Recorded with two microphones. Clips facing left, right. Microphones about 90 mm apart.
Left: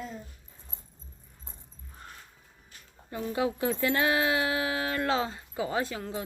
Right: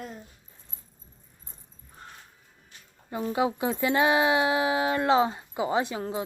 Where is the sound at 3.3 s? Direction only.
20° right (ahead or behind).